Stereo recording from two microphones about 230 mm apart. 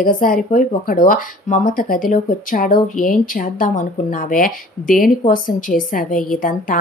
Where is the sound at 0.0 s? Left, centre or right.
Left.